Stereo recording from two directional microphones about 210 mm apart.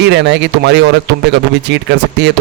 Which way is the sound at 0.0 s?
55° right (ahead or behind).